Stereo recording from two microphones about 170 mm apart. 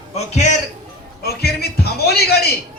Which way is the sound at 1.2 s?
70° left (ahead or behind).